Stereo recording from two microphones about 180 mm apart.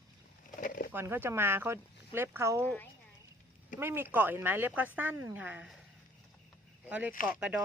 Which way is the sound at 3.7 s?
10° right (ahead or behind).